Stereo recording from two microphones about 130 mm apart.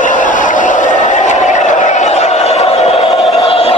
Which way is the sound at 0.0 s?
85° left.